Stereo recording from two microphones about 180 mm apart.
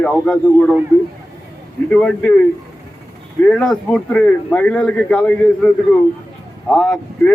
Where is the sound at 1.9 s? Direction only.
5° left (ahead or behind).